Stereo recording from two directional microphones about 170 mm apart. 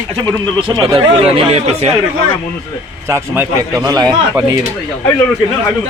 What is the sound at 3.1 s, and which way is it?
Speech, 20° right (ahead or behind).